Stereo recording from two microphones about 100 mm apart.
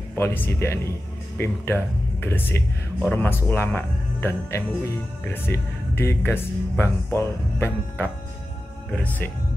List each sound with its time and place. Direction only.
0.1 s speech: 20° left (ahead or behind)
2.2 s speech: 20° left (ahead or behind)